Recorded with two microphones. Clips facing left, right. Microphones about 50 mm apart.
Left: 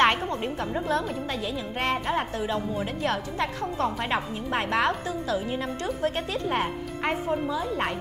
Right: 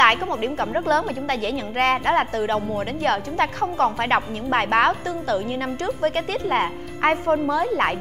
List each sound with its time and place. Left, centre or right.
0.0 s a woman's voice: right
0.8 s a woman's voice: right
2.4 s a woman's voice: right
7.0 s a woman's voice: right